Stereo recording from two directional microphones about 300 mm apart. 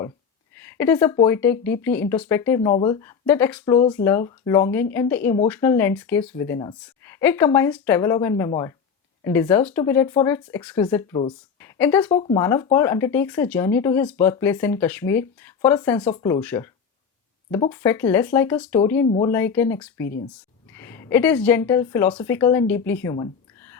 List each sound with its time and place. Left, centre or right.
0.5 s speech: centre
19.0 s speech: left
19.3 s a woman's voice: centre